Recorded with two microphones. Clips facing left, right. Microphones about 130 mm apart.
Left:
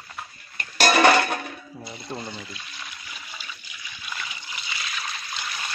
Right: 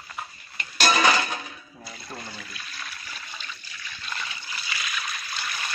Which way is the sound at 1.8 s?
25° left (ahead or behind).